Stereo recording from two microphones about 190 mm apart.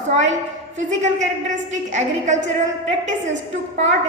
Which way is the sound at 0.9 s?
40° right (ahead or behind).